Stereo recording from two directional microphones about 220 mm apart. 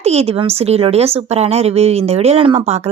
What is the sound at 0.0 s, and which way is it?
A woman's voice, 30° right (ahead or behind).